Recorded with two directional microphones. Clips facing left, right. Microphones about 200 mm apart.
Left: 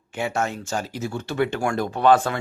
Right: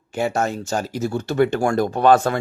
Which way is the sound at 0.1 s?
40° right (ahead or behind).